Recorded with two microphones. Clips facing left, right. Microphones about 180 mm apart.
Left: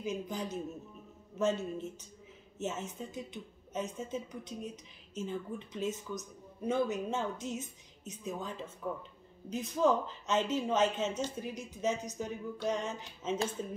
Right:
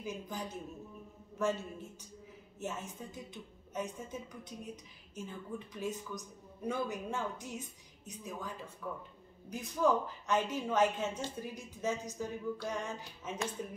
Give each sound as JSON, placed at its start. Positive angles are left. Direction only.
{"t": 0.0, "sound": "a woman's voice", "side_deg": 20}